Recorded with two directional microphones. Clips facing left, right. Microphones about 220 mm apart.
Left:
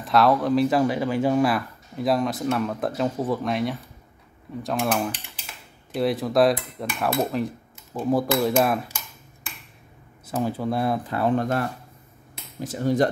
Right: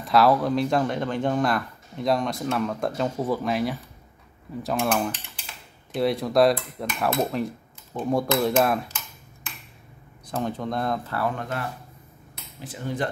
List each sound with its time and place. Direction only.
0.0 s speech: centre (ahead or behind)
8.8 s a sound: 10° left (ahead or behind)
10.3 s speech: 5° left (ahead or behind)
11.1 s speech: 25° left (ahead or behind)
12.5 s speech: 45° left (ahead or behind)